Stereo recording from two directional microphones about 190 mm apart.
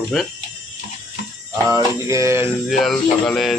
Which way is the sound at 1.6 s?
15° right (ahead or behind).